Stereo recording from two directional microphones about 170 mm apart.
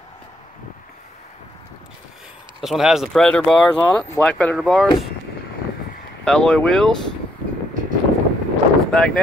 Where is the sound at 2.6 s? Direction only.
Centre (ahead or behind).